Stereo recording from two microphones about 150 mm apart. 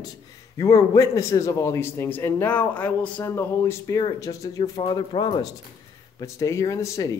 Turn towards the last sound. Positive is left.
turn(degrees=20)  # may be behind; listen again after turning